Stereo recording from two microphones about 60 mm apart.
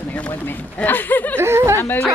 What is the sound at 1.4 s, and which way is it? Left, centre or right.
Speech, right.